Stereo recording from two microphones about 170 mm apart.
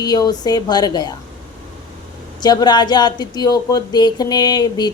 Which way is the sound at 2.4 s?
25° left (ahead or behind).